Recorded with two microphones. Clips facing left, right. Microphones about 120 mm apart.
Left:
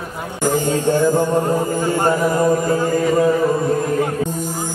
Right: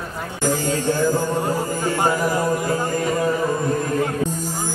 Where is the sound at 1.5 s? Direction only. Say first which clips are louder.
Left 4 dB; 20° left (ahead or behind).